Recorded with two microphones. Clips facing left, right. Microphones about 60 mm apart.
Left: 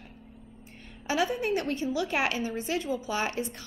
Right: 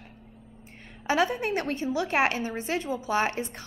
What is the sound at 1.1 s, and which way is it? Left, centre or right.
A woman's voice, right.